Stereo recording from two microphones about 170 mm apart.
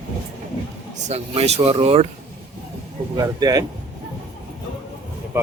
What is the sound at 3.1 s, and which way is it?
Speech, 20° right (ahead or behind).